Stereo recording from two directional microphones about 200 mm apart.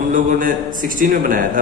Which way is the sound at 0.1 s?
40° right (ahead or behind).